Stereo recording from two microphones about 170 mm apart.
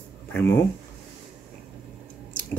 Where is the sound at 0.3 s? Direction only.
15° left (ahead or behind).